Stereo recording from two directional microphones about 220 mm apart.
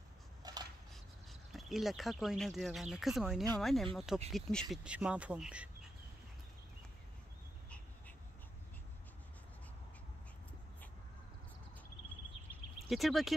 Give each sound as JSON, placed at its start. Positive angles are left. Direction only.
{"t": 0.4, "sound": "a sound", "side_deg": -20}
{"t": 1.3, "sound": "speech", "side_deg": 0}
{"t": 12.7, "sound": "speech", "side_deg": 0}